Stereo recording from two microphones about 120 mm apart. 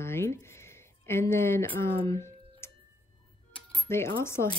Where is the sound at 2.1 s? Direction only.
20° left (ahead or behind).